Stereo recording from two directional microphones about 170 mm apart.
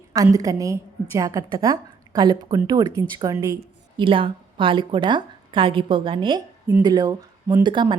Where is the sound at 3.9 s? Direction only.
30° right (ahead or behind).